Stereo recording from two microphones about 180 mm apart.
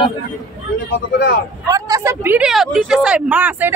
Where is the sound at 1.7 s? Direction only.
20° right (ahead or behind).